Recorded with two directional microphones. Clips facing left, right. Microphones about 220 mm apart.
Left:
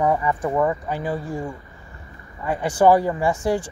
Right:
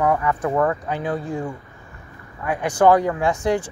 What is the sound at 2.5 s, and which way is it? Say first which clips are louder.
Speech: even; 15° right (ahead or behind).